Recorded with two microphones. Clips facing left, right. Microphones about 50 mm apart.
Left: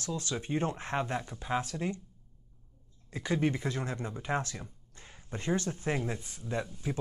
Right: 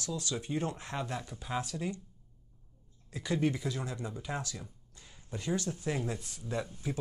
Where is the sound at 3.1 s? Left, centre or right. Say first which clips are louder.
Left 1 dB; left.